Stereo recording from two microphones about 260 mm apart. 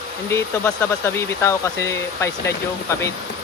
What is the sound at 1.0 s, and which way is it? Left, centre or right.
Speech, centre.